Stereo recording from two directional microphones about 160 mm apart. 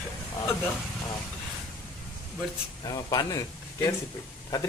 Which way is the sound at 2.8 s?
25° left (ahead or behind).